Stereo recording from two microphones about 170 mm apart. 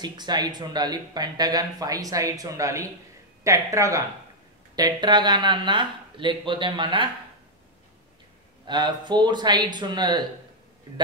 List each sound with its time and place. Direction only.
0.0 s speech: 25° right (ahead or behind)
8.6 s speech: 25° right (ahead or behind)